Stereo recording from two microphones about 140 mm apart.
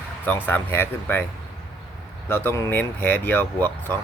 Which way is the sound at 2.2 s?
15° left (ahead or behind).